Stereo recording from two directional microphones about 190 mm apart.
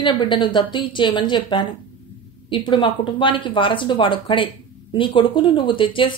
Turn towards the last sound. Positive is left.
turn(degrees=25)  # may be behind; listen again after turning